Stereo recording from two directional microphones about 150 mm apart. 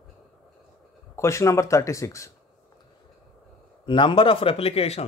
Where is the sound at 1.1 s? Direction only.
20° left (ahead or behind).